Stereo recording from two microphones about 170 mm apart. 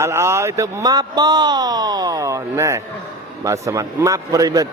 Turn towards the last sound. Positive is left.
turn(degrees=-20)  # may be behind; listen again after turning